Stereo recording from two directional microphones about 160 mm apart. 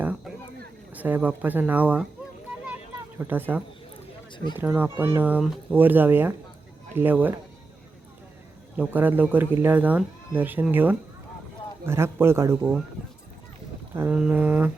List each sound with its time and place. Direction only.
0.0 s a sound: 10° right (ahead or behind)
0.9 s speech: 10° right (ahead or behind)
3.2 s speech: 10° right (ahead or behind)
8.7 s speech: 10° right (ahead or behind)
13.9 s mantra: 15° right (ahead or behind)
14.2 s speech: 10° right (ahead or behind)